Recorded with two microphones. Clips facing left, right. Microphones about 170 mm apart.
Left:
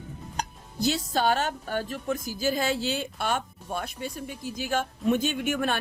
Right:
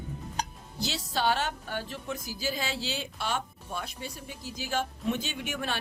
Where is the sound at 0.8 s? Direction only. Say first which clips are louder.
Left 6 dB; 50° left (ahead or behind).